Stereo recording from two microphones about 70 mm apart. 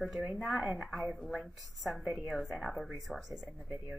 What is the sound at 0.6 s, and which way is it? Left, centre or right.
Speech, centre.